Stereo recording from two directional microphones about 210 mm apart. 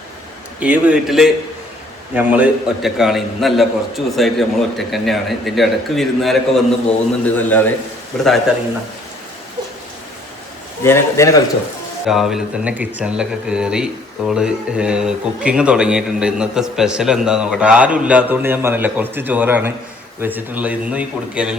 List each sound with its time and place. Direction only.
0.6 s a man's voice: 5° right (ahead or behind)
10.8 s a man's voice: 10° left (ahead or behind)
12.0 s a man's voice: centre (ahead or behind)